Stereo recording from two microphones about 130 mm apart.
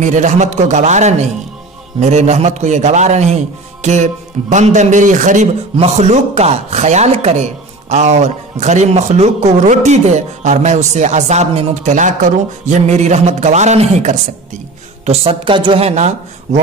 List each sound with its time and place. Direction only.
0.0 s speech: 65° right (ahead or behind)
5.8 s speech: 55° right (ahead or behind)
15.0 s a woman's voice: 40° right (ahead or behind)
15.8 s speech: 60° right (ahead or behind)